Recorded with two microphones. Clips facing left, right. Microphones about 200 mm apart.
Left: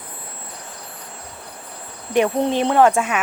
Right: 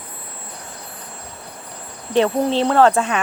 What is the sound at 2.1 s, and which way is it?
Speech, 10° left (ahead or behind).